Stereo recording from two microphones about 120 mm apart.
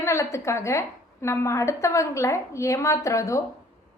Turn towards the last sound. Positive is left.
turn(degrees=25)  # may be behind; listen again after turning